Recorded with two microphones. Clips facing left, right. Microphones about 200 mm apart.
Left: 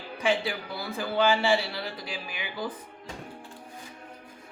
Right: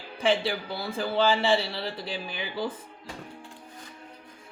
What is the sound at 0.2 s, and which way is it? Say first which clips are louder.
Speech: right 2 dB; 30° right (ahead or behind).